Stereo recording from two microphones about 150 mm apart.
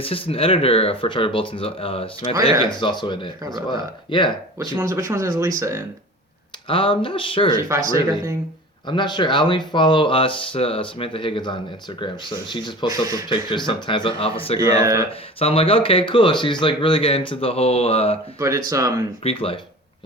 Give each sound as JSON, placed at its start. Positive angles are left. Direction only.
{"t": 0.0, "sound": "speech", "side_deg": 40}
{"t": 4.5, "sound": "speech", "side_deg": -20}
{"t": 6.7, "sound": "speech", "side_deg": 35}
{"t": 7.7, "sound": "speech", "side_deg": -20}
{"t": 8.9, "sound": "speech", "side_deg": 30}
{"t": 12.9, "sound": "speech", "side_deg": -25}
{"t": 13.3, "sound": "speech", "side_deg": 30}
{"t": 14.7, "sound": "speech", "side_deg": -25}
{"t": 15.4, "sound": "speech", "side_deg": 40}
{"t": 18.3, "sound": "speech", "side_deg": -20}
{"t": 19.2, "sound": "speech", "side_deg": 40}